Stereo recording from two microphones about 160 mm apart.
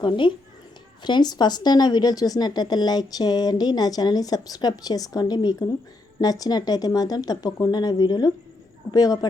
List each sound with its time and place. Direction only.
0.0 s a child's voice: 30° left (ahead or behind)